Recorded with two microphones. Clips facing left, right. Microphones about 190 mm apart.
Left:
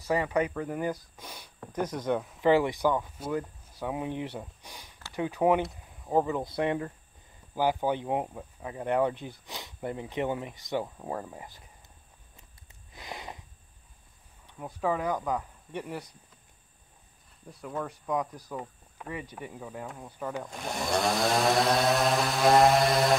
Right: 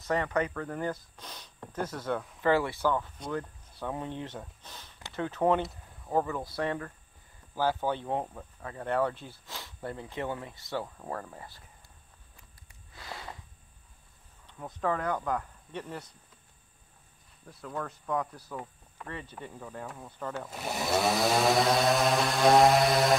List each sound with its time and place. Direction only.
0.0 s speech: 10° left (ahead or behind)
12.9 s a sound: 20° left (ahead or behind)
14.4 s speech: 10° left (ahead or behind)
17.5 s speech: 10° left (ahead or behind)
20.4 s chainsaw: 5° right (ahead or behind)